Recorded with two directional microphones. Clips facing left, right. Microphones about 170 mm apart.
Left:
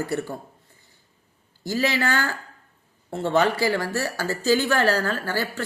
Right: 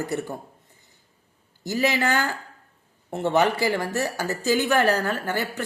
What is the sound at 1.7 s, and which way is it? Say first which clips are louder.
A woman's voice: right 1 dB; 20° right (ahead or behind).